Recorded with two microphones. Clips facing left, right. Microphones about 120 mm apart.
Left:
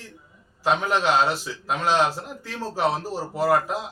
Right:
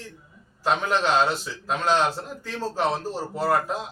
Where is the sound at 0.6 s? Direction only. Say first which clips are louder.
Left 1 dB; 10° left (ahead or behind).